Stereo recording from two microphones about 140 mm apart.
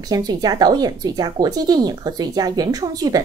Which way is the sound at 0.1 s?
30° right (ahead or behind).